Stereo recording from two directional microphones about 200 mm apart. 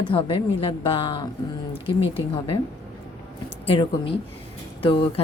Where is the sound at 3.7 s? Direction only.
25° left (ahead or behind).